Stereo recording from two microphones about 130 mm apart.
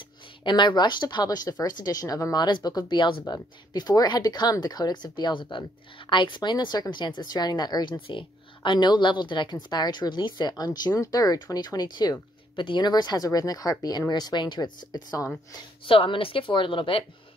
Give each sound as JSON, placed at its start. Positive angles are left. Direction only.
{"t": 0.4, "sound": "speech", "side_deg": 35}
{"t": 15.8, "sound": "speech", "side_deg": 45}